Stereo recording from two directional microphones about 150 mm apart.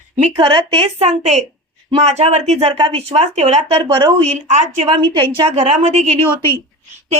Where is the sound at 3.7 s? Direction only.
35° right (ahead or behind).